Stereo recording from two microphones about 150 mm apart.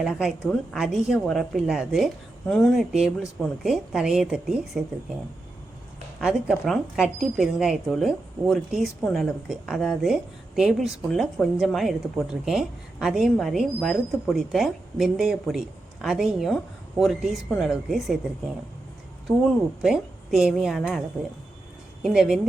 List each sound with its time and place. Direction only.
0.0 s speech: 5° right (ahead or behind)
6.1 s speech: centre (ahead or behind)
19.5 s speech: centre (ahead or behind)
22.0 s speech: centre (ahead or behind)